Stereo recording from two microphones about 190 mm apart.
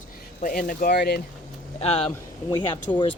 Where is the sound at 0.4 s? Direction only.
45° left (ahead or behind).